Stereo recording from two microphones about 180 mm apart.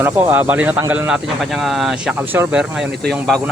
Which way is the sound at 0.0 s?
10° right (ahead or behind).